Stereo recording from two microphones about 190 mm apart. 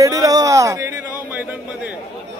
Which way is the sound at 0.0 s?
15° right (ahead or behind).